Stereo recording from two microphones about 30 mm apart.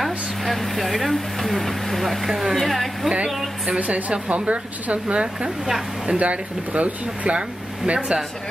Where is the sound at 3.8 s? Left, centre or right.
Right.